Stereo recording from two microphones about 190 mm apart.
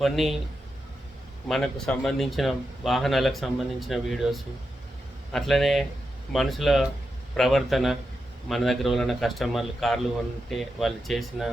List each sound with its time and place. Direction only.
0.0 s speech: centre (ahead or behind)
1.5 s speech: centre (ahead or behind)